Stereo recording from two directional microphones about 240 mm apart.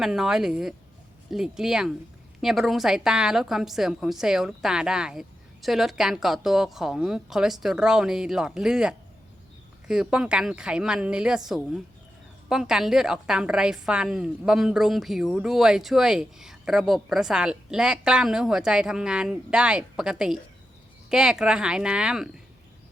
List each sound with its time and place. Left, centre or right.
0.0 s a woman's voice: centre